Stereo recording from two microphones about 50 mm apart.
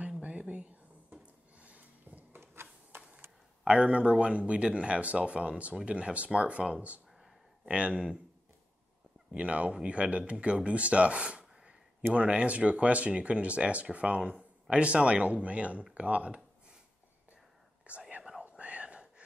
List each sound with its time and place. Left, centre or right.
0.2 s a sound: right
2.3 s a sound: right
3.6 s speech: right
7.2 s a sound: centre
7.7 s speech: right
9.3 s speech: right
11.4 s gasp: centre
12.1 s speech: right
17.9 s speech: right
18.4 s whispering: right